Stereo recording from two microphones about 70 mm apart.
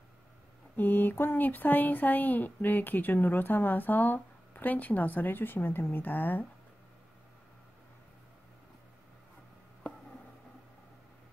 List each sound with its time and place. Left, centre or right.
0.7 s speech: left